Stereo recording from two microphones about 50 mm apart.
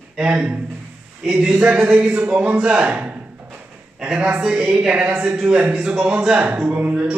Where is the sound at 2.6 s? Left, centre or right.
Centre.